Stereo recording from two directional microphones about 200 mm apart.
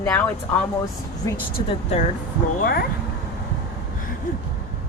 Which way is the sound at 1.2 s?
20° left (ahead or behind).